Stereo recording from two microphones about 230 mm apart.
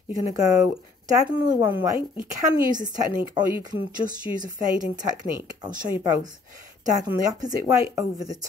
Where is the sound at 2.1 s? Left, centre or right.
Centre.